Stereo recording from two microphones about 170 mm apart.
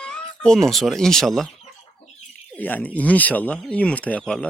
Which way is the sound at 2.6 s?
10° left (ahead or behind).